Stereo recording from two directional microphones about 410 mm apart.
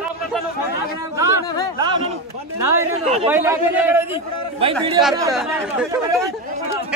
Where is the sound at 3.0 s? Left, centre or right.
Centre.